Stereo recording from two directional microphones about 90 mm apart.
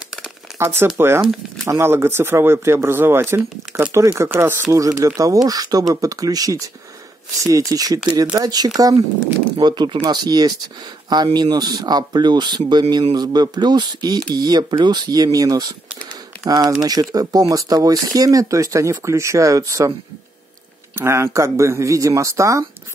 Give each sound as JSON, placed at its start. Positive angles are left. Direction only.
{"t": 0.6, "sound": "speech", "side_deg": -25}
{"t": 4.7, "sound": "speech", "side_deg": -40}
{"t": 20.9, "sound": "speech", "side_deg": -30}